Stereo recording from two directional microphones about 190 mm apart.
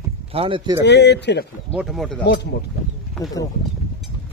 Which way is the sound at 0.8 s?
65° left (ahead or behind).